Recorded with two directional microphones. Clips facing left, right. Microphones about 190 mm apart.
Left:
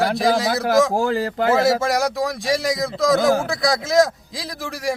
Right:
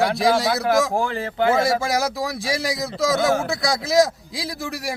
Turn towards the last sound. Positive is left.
turn(degrees=0)  # may be behind; listen again after turning